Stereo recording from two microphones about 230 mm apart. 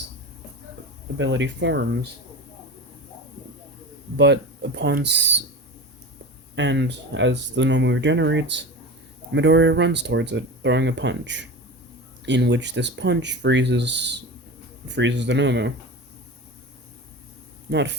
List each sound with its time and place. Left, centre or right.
1.2 s speech: right
4.2 s speech: right
6.6 s speech: right
17.7 s speech: right